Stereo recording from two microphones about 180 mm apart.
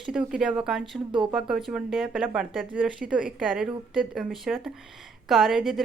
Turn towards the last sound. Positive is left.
turn(degrees=0)  # may be behind; listen again after turning